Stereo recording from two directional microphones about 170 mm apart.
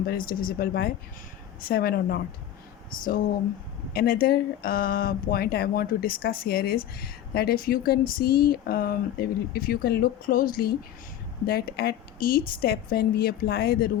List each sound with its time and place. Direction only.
0.0 s speech: 60° left (ahead or behind)
3.9 s speech: 60° left (ahead or behind)